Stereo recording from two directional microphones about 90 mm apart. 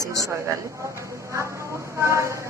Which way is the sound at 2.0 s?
35° right (ahead or behind).